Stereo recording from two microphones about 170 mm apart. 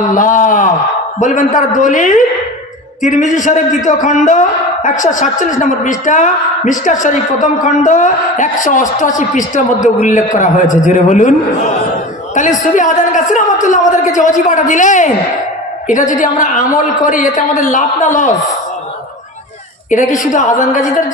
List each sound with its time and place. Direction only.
0.1 s a man's voice: 50° left (ahead or behind)
19.9 s a man's voice: 45° left (ahead or behind)